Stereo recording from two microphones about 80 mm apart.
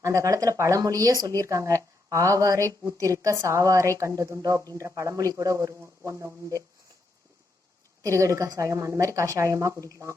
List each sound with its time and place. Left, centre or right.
0.0 s a woman's voice: right
8.0 s a woman's voice: right